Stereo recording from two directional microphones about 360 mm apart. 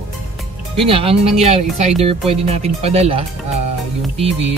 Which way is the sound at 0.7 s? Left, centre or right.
Centre.